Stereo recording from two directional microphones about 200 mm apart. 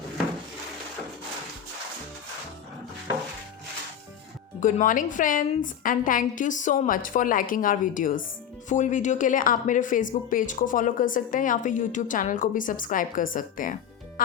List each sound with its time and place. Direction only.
4.6 s a woman's voice: 40° left (ahead or behind)